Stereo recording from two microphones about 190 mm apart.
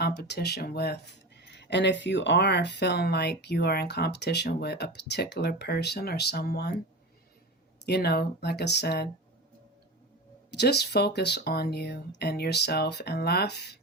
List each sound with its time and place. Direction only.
0.0 s speech: 55° left (ahead or behind)
7.9 s speech: 60° left (ahead or behind)
10.5 s speech: 60° left (ahead or behind)